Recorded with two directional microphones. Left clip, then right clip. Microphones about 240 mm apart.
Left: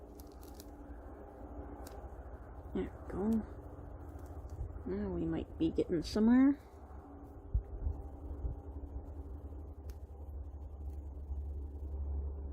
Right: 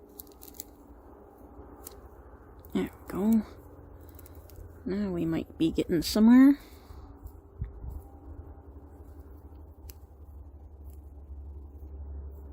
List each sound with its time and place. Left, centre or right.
0.4 s a sound: centre
2.7 s speech: right
4.9 s speech: right